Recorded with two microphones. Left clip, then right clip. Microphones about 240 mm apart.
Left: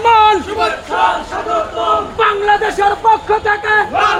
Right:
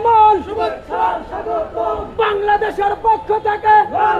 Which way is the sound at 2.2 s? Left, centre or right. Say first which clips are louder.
Even; left.